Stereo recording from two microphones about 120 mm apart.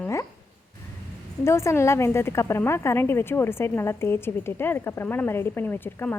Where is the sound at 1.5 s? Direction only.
25° left (ahead or behind).